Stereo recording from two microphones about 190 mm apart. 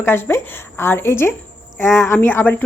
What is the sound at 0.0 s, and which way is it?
A woman's voice, 10° left (ahead or behind).